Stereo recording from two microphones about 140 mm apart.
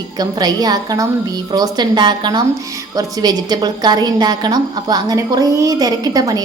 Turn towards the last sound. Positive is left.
turn(degrees=-25)  # may be behind; listen again after turning